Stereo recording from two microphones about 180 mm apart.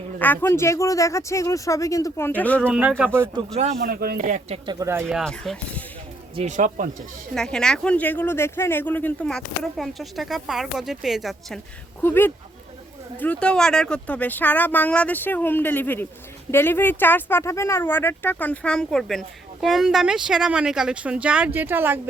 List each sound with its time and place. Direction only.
0.2 s speech: 10° left (ahead or behind)
2.6 s speech: 5° right (ahead or behind)
3.8 s speech: 55° right (ahead or behind); by 5.0 s 15° right (ahead or behind)
5.0 s speech: 5° left (ahead or behind)
6.3 s speech: 40° right (ahead or behind)
7.3 s speech: 5° left (ahead or behind)
12.0 s speech: 10° left (ahead or behind); by 22.0 s 10° right (ahead or behind)